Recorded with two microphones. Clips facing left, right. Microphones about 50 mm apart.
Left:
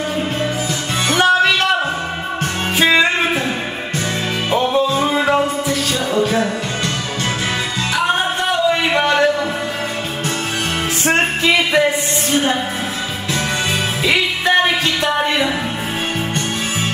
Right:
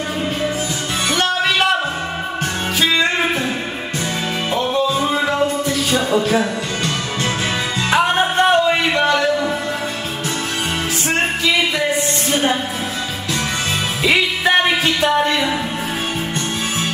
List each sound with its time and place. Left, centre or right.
2.8 s music: left
4.5 s music: left
8.9 s a sound: centre
11.1 s music: left
14.0 s music: centre
15.1 s music: centre